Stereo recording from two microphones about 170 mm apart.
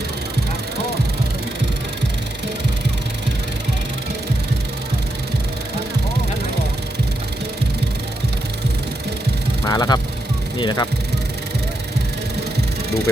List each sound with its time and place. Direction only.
9.6 s vehicle: 20° left (ahead or behind)
10.6 s speech: 25° left (ahead or behind)